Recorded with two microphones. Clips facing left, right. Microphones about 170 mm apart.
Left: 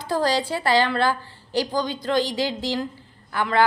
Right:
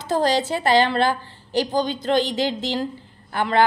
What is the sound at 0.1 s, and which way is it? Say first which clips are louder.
A woman's voice: right 2 dB; 20° right (ahead or behind).